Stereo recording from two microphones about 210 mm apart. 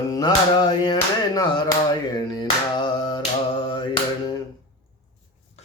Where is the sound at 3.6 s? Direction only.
20° left (ahead or behind).